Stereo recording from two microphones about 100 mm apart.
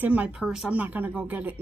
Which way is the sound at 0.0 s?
15° right (ahead or behind).